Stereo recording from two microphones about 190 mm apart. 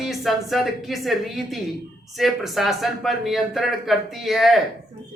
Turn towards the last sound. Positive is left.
turn(degrees=0)  # may be behind; listen again after turning